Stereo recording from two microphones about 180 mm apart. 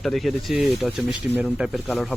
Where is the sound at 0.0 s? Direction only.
Centre (ahead or behind).